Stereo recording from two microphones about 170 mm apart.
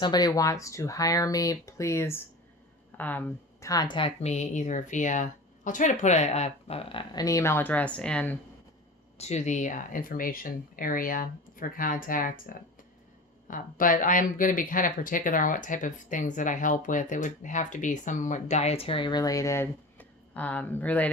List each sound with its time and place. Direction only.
0.0 s speech: 25° left (ahead or behind)
9.1 s speech: 40° left (ahead or behind)
13.5 s speech: 55° left (ahead or behind); by 21.1 s 10° left (ahead or behind)